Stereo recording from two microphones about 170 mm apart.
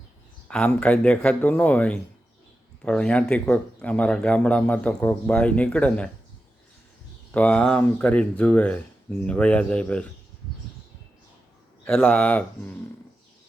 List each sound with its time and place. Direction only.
0.4 s speech: 5° left (ahead or behind)
7.3 s speech: 10° left (ahead or behind)
11.9 s speech: 5° left (ahead or behind)